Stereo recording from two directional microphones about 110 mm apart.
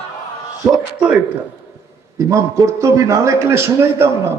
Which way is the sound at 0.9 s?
10° right (ahead or behind).